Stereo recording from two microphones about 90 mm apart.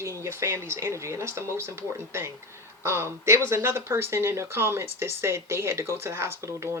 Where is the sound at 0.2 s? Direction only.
30° right (ahead or behind).